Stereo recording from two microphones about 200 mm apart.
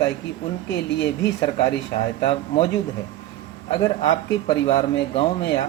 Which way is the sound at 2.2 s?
30° left (ahead or behind).